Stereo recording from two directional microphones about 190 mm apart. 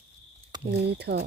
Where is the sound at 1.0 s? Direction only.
60° right (ahead or behind).